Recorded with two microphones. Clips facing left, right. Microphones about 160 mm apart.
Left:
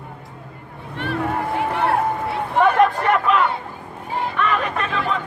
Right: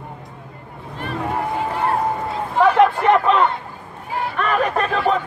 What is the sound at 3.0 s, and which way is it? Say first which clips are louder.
Speech: right 3 dB; 25° right (ahead or behind).